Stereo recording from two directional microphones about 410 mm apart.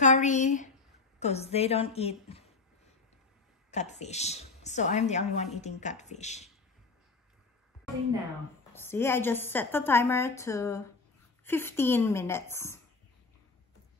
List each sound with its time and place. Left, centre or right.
0.0 s a woman's voice: centre
3.7 s a woman's voice: centre
8.7 s a woman's voice: centre